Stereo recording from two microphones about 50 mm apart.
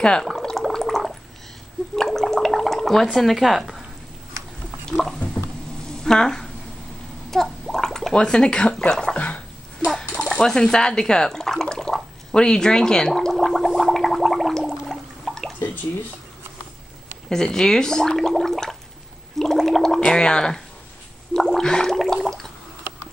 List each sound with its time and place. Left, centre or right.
0.2 s a sound: centre
5.4 s a sound: centre
7.2 s gargling: centre
8.1 s speech: centre
8.7 s speech: centre
9.1 s speech: left
10.2 s speech: centre
11.6 s gargling: centre
17.3 s speech: centre
18.3 s a sound: centre
19.3 s gargling: centre
20.0 s gargling: centre
21.4 s a sound: centre